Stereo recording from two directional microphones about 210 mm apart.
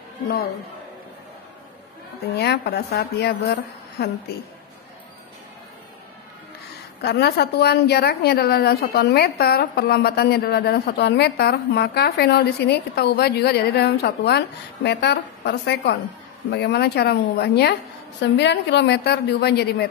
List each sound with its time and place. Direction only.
2.3 s a woman's voice: 50° left (ahead or behind)
7.0 s a woman's voice: 50° left (ahead or behind)